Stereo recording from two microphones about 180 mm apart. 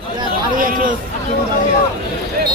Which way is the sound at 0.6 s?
50° right (ahead or behind).